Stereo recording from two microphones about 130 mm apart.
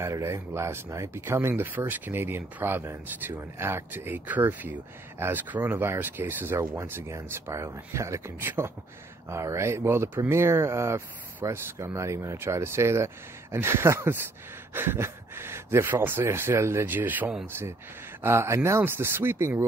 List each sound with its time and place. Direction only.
0.0 s speech: 20° right (ahead or behind)